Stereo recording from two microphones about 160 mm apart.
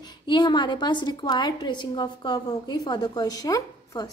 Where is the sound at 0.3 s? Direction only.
25° left (ahead or behind).